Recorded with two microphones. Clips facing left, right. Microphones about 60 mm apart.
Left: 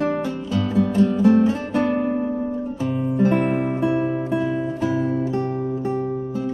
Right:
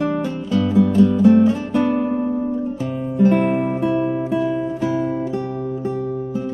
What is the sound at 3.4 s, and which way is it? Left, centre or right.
Music, centre.